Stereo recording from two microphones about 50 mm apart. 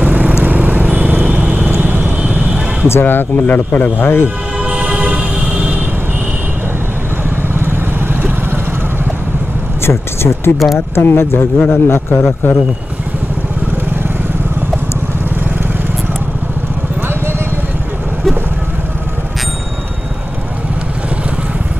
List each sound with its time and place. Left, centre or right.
0.0 s vehicle: right
1.7 s vehicle: right
2.9 s a man's voice: left
4.6 s toot: right
9.8 s speech: left
11.0 s a man's voice: left